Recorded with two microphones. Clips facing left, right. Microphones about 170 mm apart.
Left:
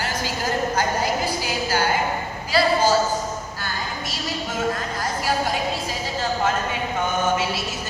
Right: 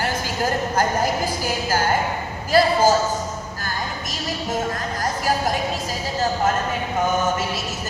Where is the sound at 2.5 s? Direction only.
45° right (ahead or behind).